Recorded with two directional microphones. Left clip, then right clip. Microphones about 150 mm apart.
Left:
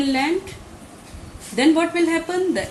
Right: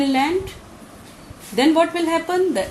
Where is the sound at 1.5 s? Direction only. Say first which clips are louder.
Right 1 dB; 40° right (ahead or behind).